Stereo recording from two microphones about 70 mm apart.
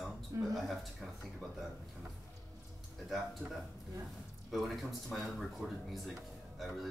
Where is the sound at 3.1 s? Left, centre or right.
Centre.